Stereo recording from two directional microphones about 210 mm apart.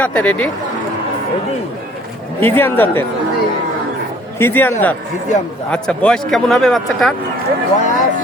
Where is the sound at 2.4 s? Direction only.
10° left (ahead or behind).